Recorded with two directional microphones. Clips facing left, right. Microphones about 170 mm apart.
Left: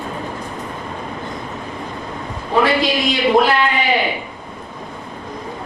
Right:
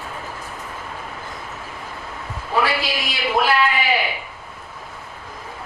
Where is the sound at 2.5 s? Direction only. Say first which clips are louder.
Left 5 dB; 20° left (ahead or behind).